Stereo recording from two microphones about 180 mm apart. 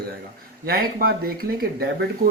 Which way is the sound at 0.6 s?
55° right (ahead or behind).